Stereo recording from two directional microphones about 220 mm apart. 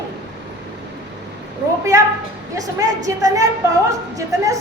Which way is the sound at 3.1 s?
15° right (ahead or behind).